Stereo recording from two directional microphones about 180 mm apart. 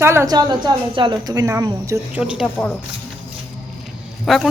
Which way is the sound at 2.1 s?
5° right (ahead or behind).